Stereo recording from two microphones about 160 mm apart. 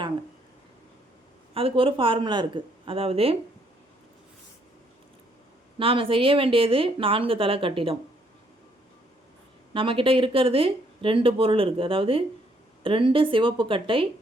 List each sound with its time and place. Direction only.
1.5 s speech: 35° right (ahead or behind)
5.8 s speech: 35° right (ahead or behind)
9.7 s speech: 35° right (ahead or behind)